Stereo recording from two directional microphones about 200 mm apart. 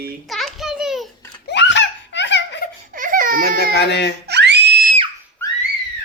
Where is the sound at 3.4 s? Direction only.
55° left (ahead or behind).